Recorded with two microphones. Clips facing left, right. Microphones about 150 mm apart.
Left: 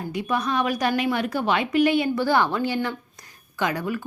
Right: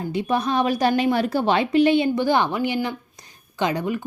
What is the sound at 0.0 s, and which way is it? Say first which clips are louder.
A woman's voice: right 3 dB; 25° right (ahead or behind).